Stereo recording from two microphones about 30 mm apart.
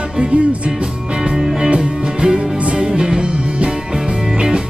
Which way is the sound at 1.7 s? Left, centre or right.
Right.